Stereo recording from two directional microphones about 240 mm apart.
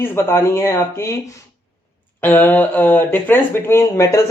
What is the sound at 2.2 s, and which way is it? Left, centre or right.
Speech, centre.